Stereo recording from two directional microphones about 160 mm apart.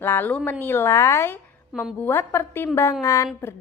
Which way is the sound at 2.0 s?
15° left (ahead or behind).